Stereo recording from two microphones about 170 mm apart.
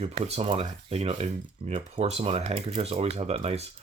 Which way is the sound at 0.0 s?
35° right (ahead or behind).